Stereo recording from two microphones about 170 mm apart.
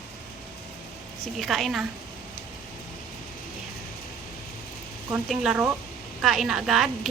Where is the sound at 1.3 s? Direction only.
Centre (ahead or behind).